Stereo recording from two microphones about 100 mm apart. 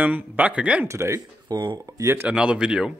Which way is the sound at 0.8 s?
30° right (ahead or behind).